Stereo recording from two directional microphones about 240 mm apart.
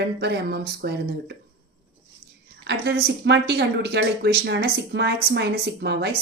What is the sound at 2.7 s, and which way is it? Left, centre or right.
Speech, right.